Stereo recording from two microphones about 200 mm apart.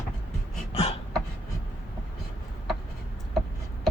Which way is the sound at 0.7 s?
30° left (ahead or behind).